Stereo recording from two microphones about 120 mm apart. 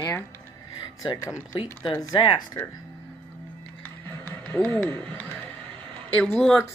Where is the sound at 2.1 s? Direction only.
40° left (ahead or behind).